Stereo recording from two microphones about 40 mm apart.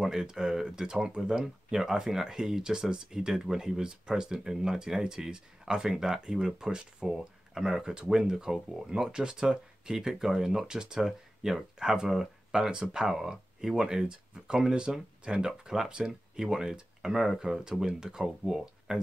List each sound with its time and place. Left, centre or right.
0.0 s speech: centre
7.1 s speech: centre